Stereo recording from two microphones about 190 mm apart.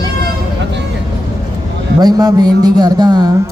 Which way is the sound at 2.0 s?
20° right (ahead or behind).